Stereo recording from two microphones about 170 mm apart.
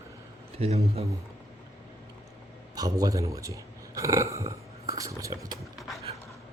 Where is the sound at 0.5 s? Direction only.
35° right (ahead or behind).